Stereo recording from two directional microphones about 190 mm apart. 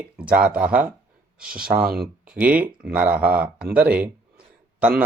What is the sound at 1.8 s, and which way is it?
Speech, 55° right (ahead or behind).